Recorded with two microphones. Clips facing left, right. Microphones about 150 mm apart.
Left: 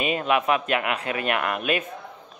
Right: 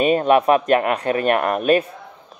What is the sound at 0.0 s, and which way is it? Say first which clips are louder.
Speech: right 8 dB; 40° right (ahead or behind).